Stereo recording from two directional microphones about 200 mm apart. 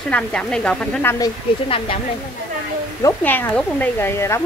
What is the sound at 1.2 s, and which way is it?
Speech, 25° left (ahead or behind).